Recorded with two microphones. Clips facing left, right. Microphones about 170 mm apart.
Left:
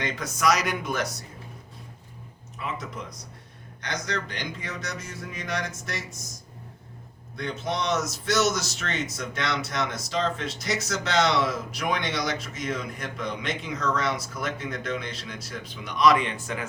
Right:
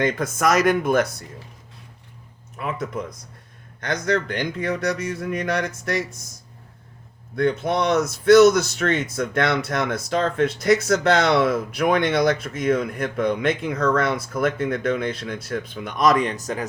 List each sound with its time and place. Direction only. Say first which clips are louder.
0.0 s speech: right 6 dB; 50° right (ahead or behind)
2.6 s speech: right 7 dB; 55° right (ahead or behind)
7.3 s speech: right 9 dB; 55° right (ahead or behind); by 16.6 s 40° right (ahead or behind)